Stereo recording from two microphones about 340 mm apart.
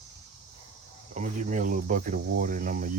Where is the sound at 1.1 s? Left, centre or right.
Right.